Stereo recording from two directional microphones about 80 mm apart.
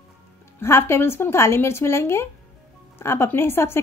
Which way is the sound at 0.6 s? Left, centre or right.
Left.